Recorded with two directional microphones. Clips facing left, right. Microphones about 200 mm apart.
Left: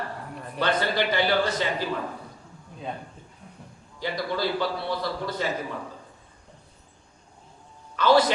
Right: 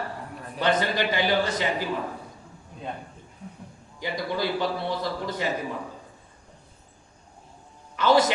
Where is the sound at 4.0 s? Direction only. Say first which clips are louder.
Even; 15° right (ahead or behind).